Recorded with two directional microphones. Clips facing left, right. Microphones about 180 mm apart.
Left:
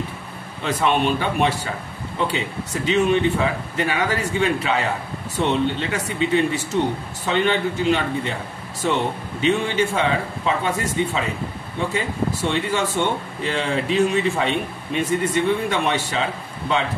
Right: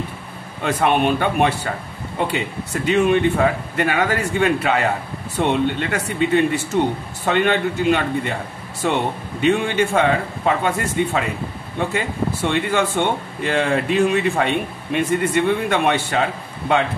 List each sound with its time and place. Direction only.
0.7 s a man's voice: 55° right (ahead or behind)
9.4 s a man's voice: 55° right (ahead or behind)